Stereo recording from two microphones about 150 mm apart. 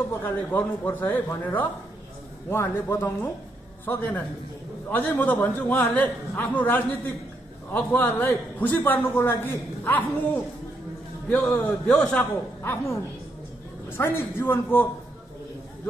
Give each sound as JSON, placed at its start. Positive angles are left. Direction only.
{"t": 0.1, "sound": "a man's voice", "side_deg": 15}